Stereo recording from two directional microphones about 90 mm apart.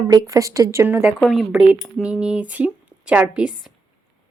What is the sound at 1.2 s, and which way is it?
Speech, centre (ahead or behind).